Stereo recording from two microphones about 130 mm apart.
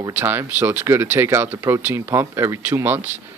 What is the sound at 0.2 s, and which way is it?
Speech, 15° right (ahead or behind).